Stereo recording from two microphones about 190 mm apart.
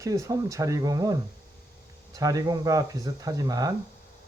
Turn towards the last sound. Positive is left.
turn(degrees=-20)  # may be behind; listen again after turning